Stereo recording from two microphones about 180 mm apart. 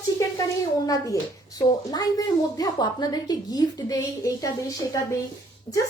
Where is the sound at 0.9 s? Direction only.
20° left (ahead or behind).